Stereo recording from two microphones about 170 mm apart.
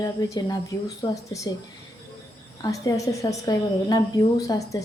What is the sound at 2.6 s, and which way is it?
A woman's voice, 20° left (ahead or behind).